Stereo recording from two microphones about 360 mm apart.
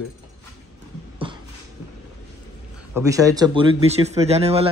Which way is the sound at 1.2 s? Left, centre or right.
Centre.